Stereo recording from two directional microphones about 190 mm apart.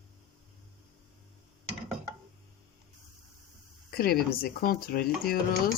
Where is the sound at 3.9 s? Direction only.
50° left (ahead or behind).